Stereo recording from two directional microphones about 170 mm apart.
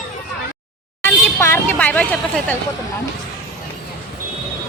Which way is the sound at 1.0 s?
15° left (ahead or behind).